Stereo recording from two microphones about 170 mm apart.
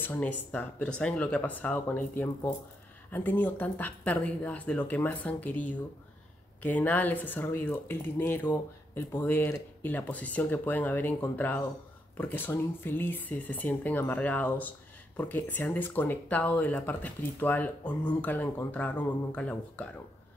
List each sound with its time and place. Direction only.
0.0 s speech: 10° left (ahead or behind)